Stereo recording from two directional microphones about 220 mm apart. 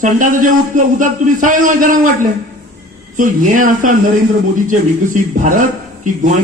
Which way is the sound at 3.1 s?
35° right (ahead or behind).